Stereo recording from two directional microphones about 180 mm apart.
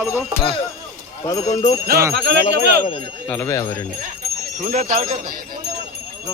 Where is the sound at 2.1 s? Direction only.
70° right (ahead or behind).